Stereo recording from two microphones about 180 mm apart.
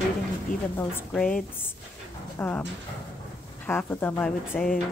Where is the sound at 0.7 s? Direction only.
10° left (ahead or behind).